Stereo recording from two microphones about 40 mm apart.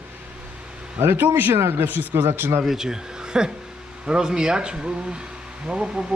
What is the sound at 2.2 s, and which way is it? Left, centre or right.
Speech, right.